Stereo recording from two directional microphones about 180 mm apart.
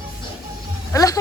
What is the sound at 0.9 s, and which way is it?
Speech, 20° left (ahead or behind).